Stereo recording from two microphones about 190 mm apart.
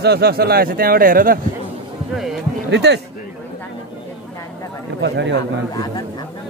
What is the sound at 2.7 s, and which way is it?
Speech, 65° right (ahead or behind).